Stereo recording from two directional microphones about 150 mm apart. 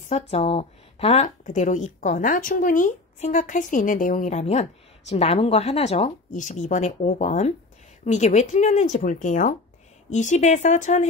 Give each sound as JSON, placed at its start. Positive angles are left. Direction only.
{"t": 0.1, "sound": "speech", "side_deg": 45}